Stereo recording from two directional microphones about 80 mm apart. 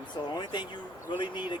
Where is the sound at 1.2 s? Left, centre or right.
Left.